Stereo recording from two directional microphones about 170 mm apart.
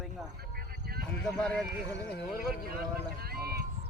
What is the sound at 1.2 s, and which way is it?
Speech, 5° left (ahead or behind).